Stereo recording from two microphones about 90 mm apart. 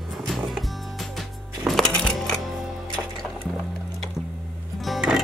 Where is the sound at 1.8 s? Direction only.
10° left (ahead or behind).